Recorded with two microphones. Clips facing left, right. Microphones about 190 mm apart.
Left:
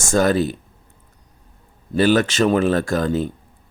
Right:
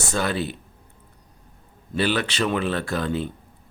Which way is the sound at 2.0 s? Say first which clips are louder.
Left 7 dB; 45° left (ahead or behind).